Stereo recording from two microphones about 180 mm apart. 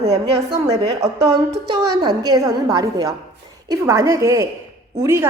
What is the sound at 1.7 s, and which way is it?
A woman's voice, 25° right (ahead or behind).